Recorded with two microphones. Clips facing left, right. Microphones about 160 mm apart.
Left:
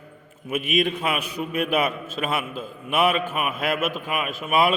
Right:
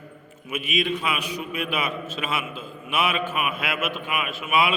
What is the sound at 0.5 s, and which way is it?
A man's voice, 50° left (ahead or behind).